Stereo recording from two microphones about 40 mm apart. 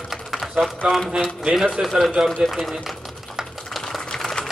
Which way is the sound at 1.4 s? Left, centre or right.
Centre.